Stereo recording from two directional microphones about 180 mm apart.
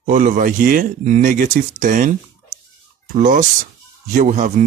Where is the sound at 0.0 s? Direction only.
45° right (ahead or behind).